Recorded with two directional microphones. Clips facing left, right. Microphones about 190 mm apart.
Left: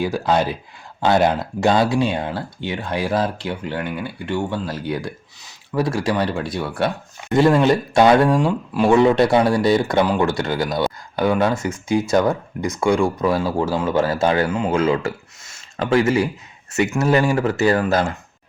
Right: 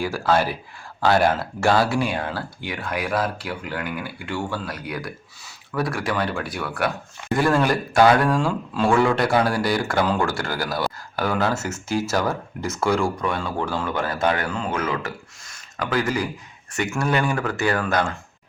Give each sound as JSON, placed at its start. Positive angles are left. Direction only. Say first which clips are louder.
{"t": 0.0, "sound": "speech", "louder": "left 2 dB", "side_deg": 20}
{"t": 13.1, "sound": "speech", "louder": "left 6 dB", "side_deg": 30}
{"t": 17.1, "sound": "speech", "louder": "left 5 dB", "side_deg": 30}